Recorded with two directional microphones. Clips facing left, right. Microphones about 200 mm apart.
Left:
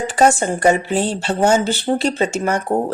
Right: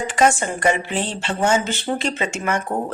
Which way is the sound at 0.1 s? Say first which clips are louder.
Left 3 dB; 35° left (ahead or behind).